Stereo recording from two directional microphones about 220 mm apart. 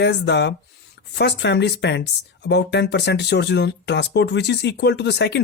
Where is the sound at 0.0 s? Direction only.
50° left (ahead or behind).